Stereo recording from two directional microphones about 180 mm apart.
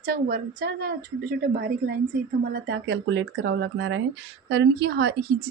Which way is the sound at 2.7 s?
85° right.